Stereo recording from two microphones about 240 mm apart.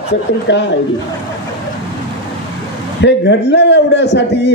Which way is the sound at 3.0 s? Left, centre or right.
Left.